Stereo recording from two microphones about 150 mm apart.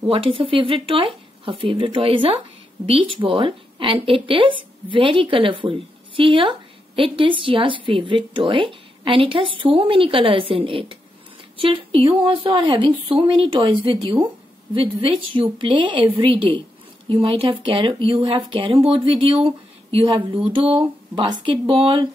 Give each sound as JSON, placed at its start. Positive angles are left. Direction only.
{"t": 0.1, "sound": "a woman's voice", "side_deg": -35}